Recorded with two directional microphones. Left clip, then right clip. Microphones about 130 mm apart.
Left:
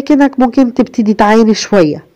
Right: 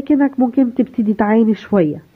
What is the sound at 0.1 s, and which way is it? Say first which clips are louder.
Speech: left 6 dB; 30° left (ahead or behind).